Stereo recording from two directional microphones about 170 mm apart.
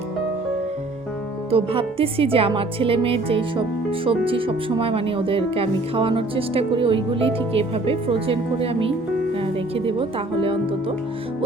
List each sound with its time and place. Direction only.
1.5 s speech: 35° right (ahead or behind)